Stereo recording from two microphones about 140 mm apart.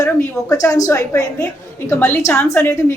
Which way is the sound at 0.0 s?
20° left (ahead or behind).